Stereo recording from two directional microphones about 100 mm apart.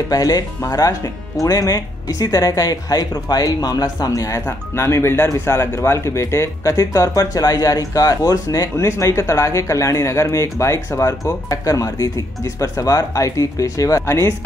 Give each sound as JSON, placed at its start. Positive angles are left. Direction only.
{"t": 0.1, "sound": "speech", "side_deg": 40}